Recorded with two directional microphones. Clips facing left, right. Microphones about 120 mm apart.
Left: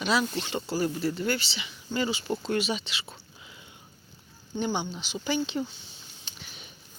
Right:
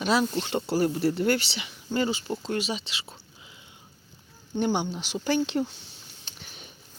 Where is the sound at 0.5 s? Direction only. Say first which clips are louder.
Right 4 dB; 55° right (ahead or behind).